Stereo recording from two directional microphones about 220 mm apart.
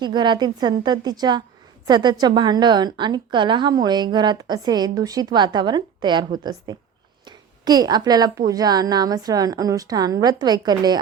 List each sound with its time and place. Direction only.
0.0 s a woman's voice: 20° right (ahead or behind)